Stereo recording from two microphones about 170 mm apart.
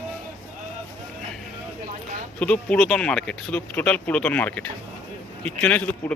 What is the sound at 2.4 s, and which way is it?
A man's voice, 10° left (ahead or behind).